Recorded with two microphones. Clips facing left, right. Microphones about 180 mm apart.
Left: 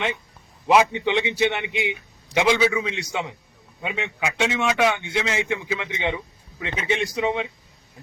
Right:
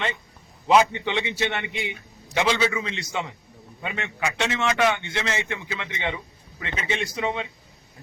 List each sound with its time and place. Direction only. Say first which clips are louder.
0.9 s a man's voice: left 4 dB; 15° left (ahead or behind)